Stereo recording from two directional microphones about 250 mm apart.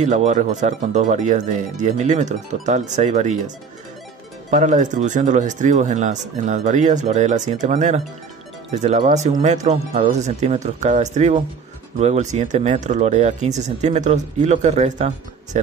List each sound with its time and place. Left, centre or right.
0.0 s speech: right
4.5 s speech: right